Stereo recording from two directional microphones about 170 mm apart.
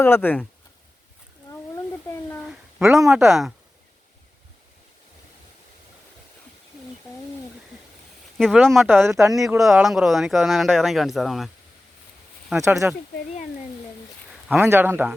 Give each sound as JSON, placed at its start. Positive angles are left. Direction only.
{"t": 0.0, "sound": "speech", "side_deg": 15}
{"t": 2.5, "sound": "a sound", "side_deg": 0}
{"t": 3.1, "sound": "speech", "side_deg": 0}
{"t": 8.4, "sound": "speech", "side_deg": 0}
{"t": 8.9, "sound": "speech", "side_deg": -15}
{"t": 9.6, "sound": "speech", "side_deg": 0}
{"t": 12.8, "sound": "speech", "side_deg": -10}
{"t": 14.3, "sound": "speech", "side_deg": -5}